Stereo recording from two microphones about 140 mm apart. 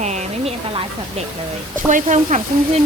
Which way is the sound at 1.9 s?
65° right (ahead or behind).